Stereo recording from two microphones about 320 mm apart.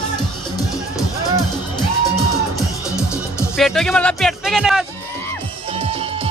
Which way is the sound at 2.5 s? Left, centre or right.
Centre.